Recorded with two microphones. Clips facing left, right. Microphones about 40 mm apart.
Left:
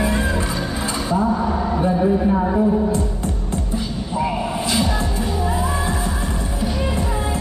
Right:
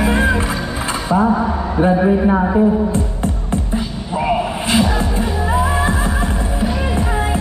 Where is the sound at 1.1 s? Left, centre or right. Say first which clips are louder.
Right 5 dB; right.